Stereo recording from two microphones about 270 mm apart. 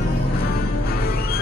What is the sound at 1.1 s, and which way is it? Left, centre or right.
Music, left.